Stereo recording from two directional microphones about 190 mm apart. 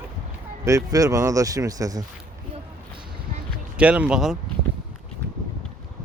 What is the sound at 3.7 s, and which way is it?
Speech, 5° right (ahead or behind).